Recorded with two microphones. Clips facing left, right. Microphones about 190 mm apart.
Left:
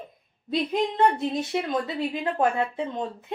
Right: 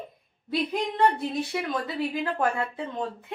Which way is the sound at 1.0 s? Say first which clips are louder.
Right 1 dB; 20° left (ahead or behind).